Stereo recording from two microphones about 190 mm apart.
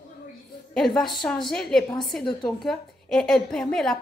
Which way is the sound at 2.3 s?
20° left (ahead or behind).